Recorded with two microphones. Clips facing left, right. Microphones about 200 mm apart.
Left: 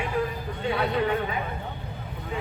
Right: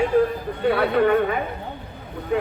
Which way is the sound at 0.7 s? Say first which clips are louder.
Right 7 dB; 60° right (ahead or behind).